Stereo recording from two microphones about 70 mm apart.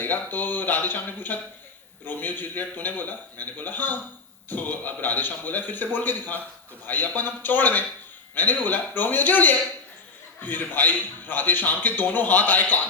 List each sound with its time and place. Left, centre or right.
0.0 s a man's voice: left